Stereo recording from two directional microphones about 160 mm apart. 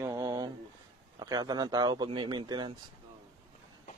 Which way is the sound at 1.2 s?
25° right (ahead or behind).